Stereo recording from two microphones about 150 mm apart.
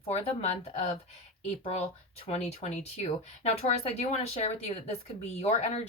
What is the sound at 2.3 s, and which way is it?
Speech, 45° left (ahead or behind).